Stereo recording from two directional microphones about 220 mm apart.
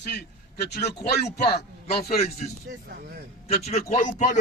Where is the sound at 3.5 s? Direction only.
30° left (ahead or behind).